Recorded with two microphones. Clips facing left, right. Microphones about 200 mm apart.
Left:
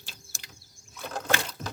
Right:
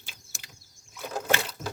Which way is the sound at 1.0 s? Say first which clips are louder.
Right 2 dB; 10° right (ahead or behind).